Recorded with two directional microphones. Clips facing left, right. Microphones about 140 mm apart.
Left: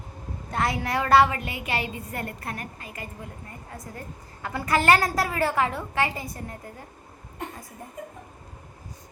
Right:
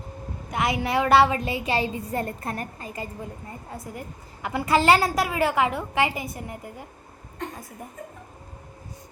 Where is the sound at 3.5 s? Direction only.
20° right (ahead or behind).